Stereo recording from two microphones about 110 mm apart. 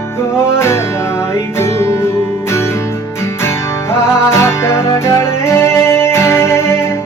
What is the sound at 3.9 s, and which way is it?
Music, 25° left (ahead or behind).